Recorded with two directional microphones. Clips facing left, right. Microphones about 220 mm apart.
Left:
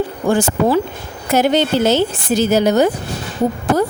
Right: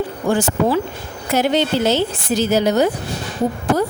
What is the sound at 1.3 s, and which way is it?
Speech, 45° left (ahead or behind).